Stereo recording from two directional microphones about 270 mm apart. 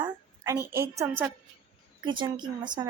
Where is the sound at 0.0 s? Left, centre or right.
Centre.